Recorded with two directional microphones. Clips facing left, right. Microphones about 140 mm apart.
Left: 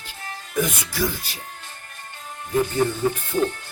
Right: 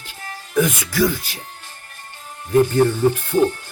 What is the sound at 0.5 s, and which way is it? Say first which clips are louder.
Speech: right 6 dB; 80° right.